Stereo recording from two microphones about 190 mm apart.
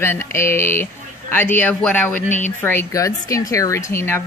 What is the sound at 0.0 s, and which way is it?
Speech, 10° left (ahead or behind).